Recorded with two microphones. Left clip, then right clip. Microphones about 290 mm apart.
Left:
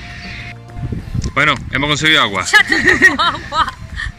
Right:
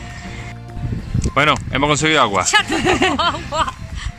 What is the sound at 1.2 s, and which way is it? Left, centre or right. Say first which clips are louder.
Speech: left 1 dB; centre.